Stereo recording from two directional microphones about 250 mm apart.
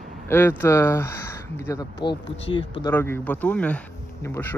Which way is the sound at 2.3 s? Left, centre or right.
Left.